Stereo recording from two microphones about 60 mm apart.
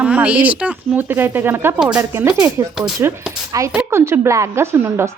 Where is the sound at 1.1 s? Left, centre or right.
Right.